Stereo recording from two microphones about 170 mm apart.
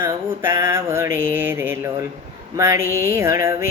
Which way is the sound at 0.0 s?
15° right (ahead or behind).